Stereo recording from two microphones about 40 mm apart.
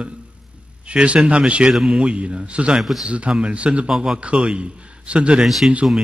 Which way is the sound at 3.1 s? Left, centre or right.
Right.